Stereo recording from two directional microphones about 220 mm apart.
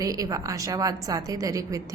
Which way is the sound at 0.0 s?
15° right (ahead or behind).